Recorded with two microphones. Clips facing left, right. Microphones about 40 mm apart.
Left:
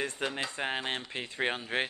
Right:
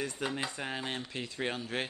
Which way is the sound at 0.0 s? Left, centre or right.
Left.